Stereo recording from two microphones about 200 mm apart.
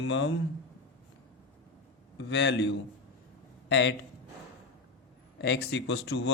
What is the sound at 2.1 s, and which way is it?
Speech, 60° left (ahead or behind).